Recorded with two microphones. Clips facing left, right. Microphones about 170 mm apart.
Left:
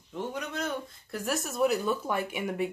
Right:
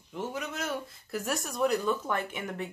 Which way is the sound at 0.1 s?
Centre (ahead or behind).